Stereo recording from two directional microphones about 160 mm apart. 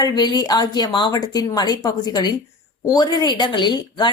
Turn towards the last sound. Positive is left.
turn(degrees=30)  # may be behind; listen again after turning